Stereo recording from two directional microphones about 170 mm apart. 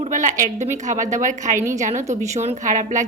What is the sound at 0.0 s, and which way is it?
A woman's voice, 50° right (ahead or behind).